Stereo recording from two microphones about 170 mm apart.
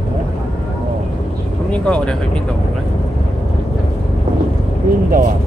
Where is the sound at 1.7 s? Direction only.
5° left (ahead or behind).